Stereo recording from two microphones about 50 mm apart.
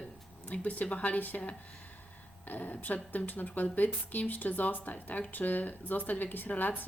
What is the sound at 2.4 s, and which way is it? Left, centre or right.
A woman's voice, left.